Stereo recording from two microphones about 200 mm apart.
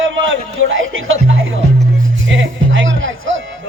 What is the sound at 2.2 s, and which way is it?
Music, 70° right (ahead or behind).